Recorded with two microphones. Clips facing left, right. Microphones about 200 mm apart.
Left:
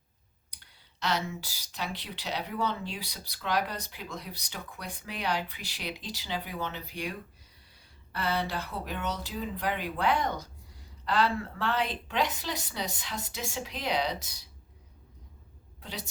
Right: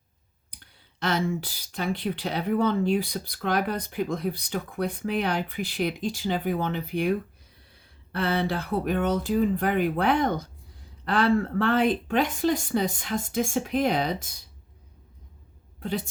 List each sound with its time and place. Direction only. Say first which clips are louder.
0.5 s speech: right 6 dB; 50° right (ahead or behind)
15.8 s a woman's voice: right 11 dB; 50° right (ahead or behind)